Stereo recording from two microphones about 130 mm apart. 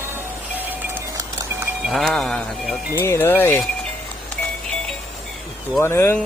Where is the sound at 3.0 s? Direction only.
20° left (ahead or behind).